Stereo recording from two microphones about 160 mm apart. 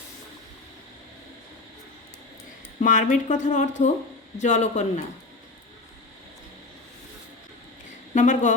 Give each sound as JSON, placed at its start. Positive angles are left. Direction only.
{"t": 2.8, "sound": "speech", "side_deg": 50}
{"t": 8.1, "sound": "speech", "side_deg": 50}